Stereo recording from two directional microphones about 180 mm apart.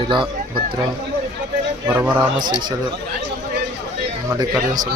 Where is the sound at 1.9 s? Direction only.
10° right (ahead or behind).